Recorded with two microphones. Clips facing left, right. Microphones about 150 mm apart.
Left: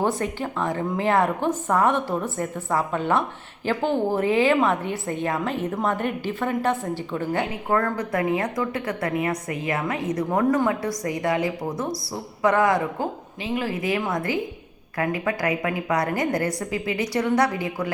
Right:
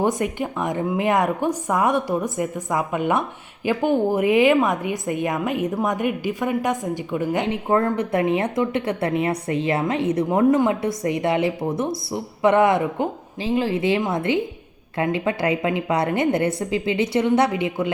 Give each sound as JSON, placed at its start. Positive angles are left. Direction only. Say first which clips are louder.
{"t": 0.0, "sound": "a woman's voice", "louder": "right 3 dB", "side_deg": -15}